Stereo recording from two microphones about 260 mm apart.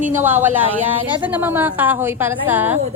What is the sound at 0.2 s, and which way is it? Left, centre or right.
A woman's voice, centre.